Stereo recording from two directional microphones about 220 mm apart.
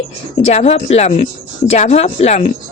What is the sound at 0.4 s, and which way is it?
Speech, 30° left (ahead or behind).